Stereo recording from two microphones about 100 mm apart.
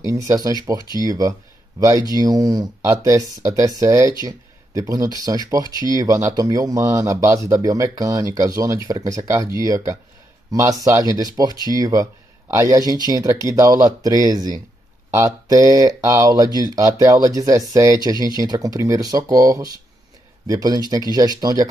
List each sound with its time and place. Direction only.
0.0 s speech: 35° right (ahead or behind)
13.3 s speech: 30° right (ahead or behind)